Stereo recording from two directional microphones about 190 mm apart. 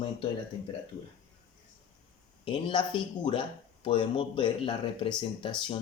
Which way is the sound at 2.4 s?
25° left (ahead or behind).